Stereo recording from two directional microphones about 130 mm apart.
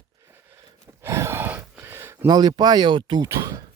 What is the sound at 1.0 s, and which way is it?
Gasp, 20° right (ahead or behind).